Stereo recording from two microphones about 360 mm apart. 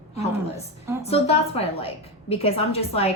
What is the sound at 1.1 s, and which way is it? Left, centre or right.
A woman's voice, centre.